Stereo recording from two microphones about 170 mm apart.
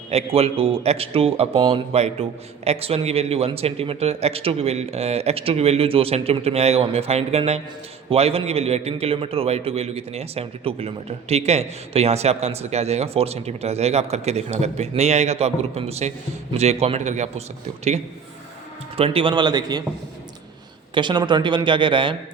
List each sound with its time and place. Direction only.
0.3 s a man's voice: 35° right (ahead or behind)
18.9 s speech: 35° right (ahead or behind)
20.9 s speech: 25° right (ahead or behind)